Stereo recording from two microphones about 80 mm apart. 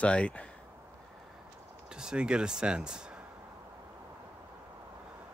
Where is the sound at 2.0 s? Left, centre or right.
Centre.